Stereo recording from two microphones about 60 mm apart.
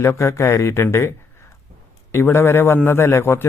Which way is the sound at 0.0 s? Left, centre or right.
Left.